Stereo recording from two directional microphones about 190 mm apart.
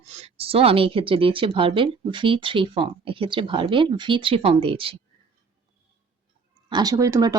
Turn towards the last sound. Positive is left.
turn(degrees=-20)  # may be behind; listen again after turning